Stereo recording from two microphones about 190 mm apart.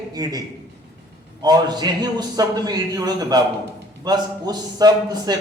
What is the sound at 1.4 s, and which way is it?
A man's voice, 20° right (ahead or behind).